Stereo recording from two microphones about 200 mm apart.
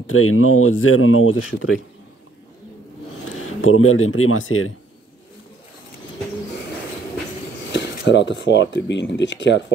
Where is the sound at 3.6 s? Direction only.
90° left.